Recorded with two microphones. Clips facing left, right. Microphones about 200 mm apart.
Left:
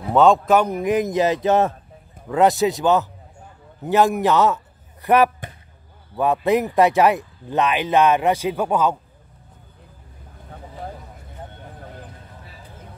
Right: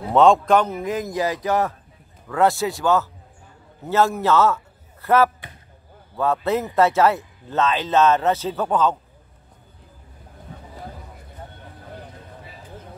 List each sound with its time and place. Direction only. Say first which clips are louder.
0.1 s speech: even; centre (ahead or behind)